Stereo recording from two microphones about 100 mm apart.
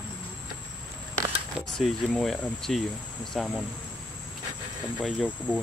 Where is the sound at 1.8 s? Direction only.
Centre (ahead or behind).